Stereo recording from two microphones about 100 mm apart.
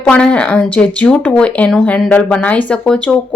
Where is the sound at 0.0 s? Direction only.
10° left (ahead or behind).